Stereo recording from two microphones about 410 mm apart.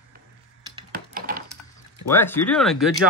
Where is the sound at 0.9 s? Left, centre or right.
Right.